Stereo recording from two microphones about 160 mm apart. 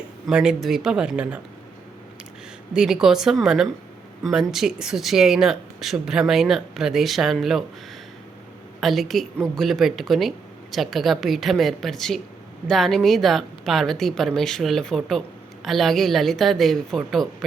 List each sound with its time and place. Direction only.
0.3 s speech: 5° right (ahead or behind)
2.7 s speech: 5° right (ahead or behind)
8.8 s speech: centre (ahead or behind)